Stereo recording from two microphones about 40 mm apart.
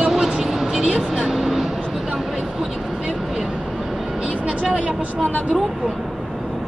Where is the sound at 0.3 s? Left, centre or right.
Centre.